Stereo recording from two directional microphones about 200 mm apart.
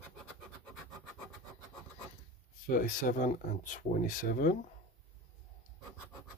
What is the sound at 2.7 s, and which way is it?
Speech, 45° left (ahead or behind).